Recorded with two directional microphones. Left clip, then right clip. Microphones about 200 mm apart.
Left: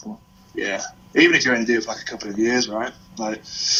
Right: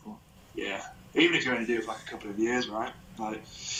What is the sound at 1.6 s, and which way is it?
Speech, 15° left (ahead or behind).